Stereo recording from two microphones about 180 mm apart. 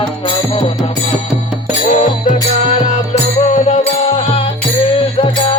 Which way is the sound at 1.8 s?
45° left (ahead or behind).